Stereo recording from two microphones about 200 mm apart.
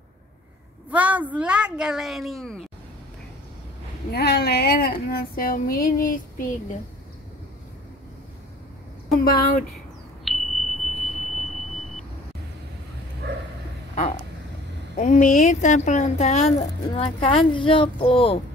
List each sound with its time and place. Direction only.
0.9 s speech: 5° right (ahead or behind)
4.1 s speech: 55° left (ahead or behind)
9.2 s speech: 50° left (ahead or behind)
10.2 s a sound: centre (ahead or behind)
11.1 s smoke detector: centre (ahead or behind)
13.2 s a sound: 55° right (ahead or behind)
15.0 s a woman's voice: 40° left (ahead or behind)